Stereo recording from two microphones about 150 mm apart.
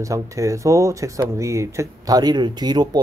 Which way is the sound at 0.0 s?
20° right (ahead or behind).